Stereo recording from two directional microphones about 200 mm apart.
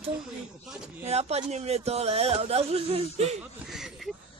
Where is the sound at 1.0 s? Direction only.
30° right (ahead or behind).